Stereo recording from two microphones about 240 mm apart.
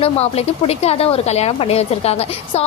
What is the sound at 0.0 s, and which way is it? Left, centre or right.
Speech, left.